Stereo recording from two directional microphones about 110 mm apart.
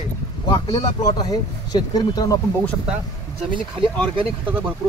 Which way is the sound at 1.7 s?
35° left (ahead or behind).